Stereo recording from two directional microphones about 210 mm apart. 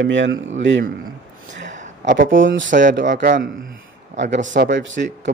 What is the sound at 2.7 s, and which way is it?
Speech, 40° right (ahead or behind).